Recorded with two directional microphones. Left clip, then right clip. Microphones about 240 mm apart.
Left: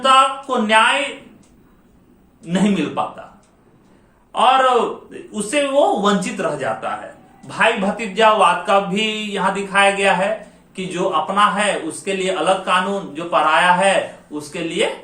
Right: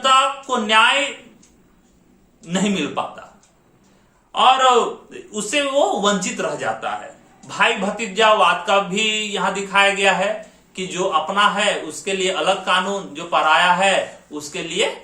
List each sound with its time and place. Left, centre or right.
0.0 s speech: centre
2.5 s speech: centre
4.3 s a man's voice: centre